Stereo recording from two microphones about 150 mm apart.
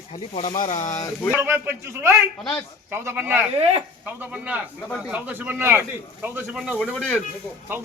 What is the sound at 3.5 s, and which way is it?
Speech, 45° right (ahead or behind).